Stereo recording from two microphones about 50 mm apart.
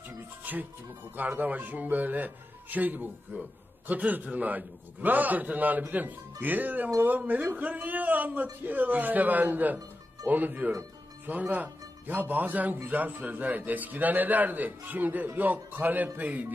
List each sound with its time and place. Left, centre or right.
0.4 s music: right
1.1 s a man's voice: right